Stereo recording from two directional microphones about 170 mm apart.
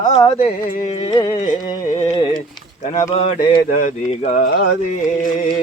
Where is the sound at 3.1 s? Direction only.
35° left (ahead or behind).